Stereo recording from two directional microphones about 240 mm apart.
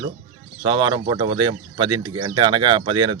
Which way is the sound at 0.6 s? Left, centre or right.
Centre.